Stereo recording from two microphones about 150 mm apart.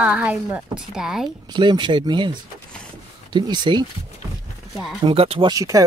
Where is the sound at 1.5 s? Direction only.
30° right (ahead or behind).